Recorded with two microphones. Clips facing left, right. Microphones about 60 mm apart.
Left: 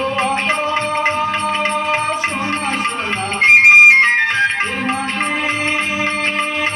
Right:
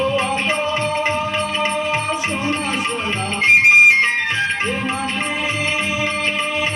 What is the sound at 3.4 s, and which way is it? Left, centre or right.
Music, left.